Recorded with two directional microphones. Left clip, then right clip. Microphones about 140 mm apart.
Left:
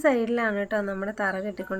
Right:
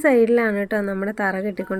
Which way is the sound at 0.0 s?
30° right (ahead or behind).